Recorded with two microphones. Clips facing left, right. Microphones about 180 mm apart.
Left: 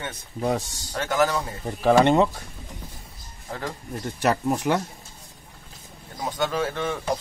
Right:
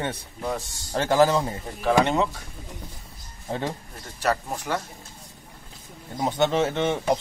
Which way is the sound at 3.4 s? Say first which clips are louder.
Right 4 dB; 25° right (ahead or behind).